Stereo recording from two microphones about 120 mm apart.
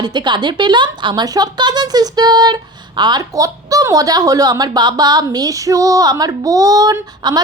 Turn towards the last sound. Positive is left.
turn(degrees=-35)  # may be behind; listen again after turning